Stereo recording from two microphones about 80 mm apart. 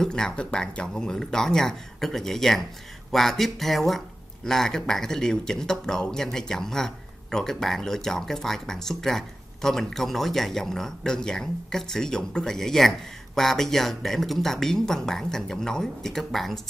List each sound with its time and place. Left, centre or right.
0.0 s speech: centre